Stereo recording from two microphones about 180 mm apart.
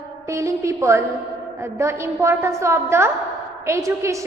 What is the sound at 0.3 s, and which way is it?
A woman's voice, 15° right (ahead or behind).